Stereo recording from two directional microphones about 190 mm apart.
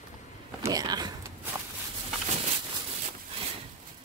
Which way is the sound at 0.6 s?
20° right (ahead or behind).